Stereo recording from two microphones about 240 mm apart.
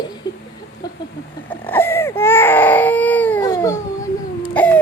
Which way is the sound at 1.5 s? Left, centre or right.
Centre.